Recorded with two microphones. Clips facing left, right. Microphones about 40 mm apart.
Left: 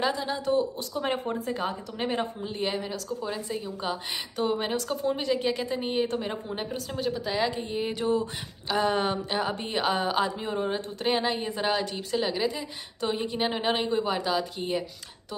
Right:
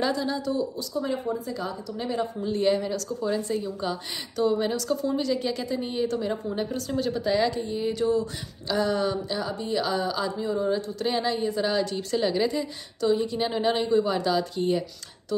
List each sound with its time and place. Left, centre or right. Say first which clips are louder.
0.0 s a woman's voice: right 2 dB; left
0.5 s speech: left 2 dB; left
2.4 s a woman's voice: right 6 dB; centre
4.4 s a woman's voice: right 4 dB; left; by 7.4 s centre
7.6 s a woman's voice: right 3 dB; left
8.9 s a woman's voice: even; left
11.7 s a woman's voice: right 2 dB; centre
13.0 s a woman's voice: right 4 dB; left; by 14.8 s centre